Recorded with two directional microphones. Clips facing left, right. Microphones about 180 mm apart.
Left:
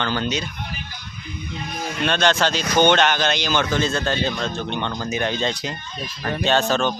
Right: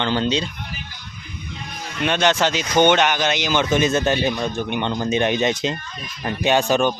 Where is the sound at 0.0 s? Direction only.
25° right (ahead or behind).